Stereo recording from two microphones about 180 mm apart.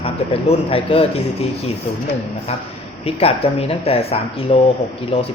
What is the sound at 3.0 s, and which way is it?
A woman's voice, 35° left (ahead or behind).